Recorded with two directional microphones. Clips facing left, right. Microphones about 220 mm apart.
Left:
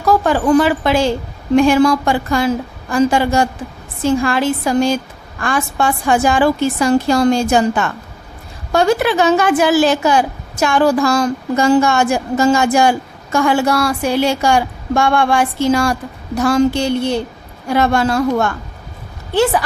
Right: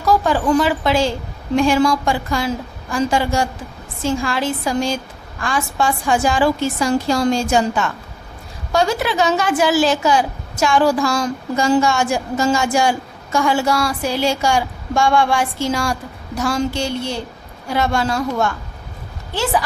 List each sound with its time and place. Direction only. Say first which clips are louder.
0.0 s a woman's voice: left 3 dB; 55° left (ahead or behind)